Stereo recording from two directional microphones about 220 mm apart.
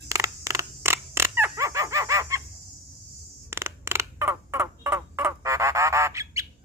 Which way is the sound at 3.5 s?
10° right (ahead or behind).